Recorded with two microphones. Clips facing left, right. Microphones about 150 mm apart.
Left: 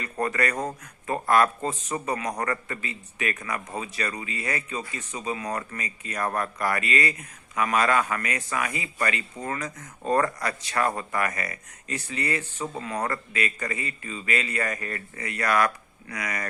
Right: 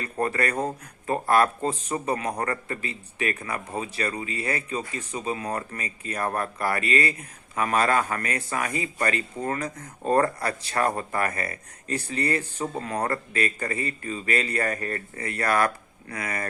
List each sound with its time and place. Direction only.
0.0 s speech: 30° right (ahead or behind)